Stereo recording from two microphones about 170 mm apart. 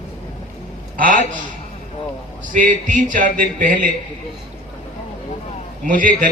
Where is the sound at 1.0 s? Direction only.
50° right (ahead or behind).